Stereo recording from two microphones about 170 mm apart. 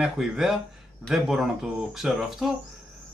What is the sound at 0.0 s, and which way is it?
Speech, 5° right (ahead or behind).